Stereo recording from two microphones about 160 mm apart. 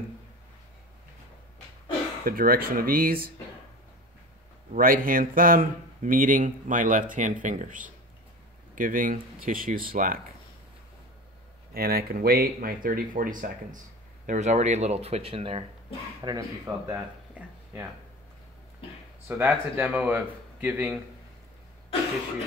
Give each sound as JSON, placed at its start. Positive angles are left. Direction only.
{"t": 2.2, "sound": "speech", "side_deg": -65}
{"t": 4.7, "sound": "speech", "side_deg": -60}
{"t": 11.7, "sound": "speech", "side_deg": -70}
{"t": 16.2, "sound": "speech", "side_deg": -20}
{"t": 19.2, "sound": "a man's voice", "side_deg": -10}